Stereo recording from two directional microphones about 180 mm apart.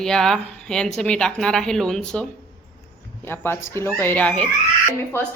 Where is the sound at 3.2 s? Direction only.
10° left (ahead or behind).